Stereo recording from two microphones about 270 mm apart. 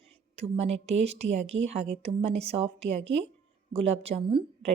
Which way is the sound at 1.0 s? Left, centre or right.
Right.